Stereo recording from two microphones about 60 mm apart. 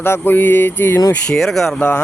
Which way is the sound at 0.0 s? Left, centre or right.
Left.